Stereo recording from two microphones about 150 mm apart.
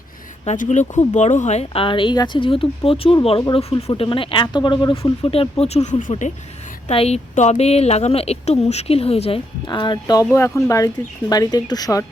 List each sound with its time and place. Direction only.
0.4 s a woman's voice: 55° left (ahead or behind)
9.6 s speech: 30° left (ahead or behind)